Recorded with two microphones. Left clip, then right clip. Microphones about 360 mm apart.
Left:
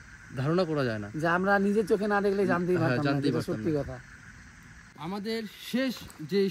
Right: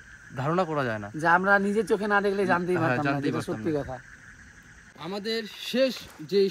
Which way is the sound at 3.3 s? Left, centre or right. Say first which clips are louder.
Right 1 dB; right.